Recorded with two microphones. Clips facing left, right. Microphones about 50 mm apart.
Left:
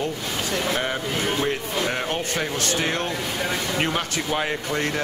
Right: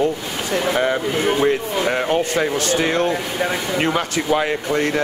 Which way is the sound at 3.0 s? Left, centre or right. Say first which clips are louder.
Right 6 dB; right.